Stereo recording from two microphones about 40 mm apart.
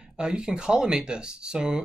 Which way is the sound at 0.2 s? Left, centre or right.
Right.